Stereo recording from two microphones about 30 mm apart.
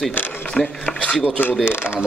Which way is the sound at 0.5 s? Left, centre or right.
Left.